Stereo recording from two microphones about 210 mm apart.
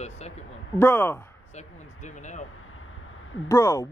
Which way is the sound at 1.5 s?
35° left (ahead or behind).